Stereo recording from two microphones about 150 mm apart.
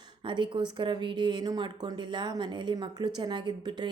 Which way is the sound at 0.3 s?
35° right (ahead or behind).